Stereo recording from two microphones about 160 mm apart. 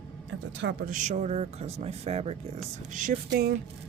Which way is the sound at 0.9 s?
50° right (ahead or behind).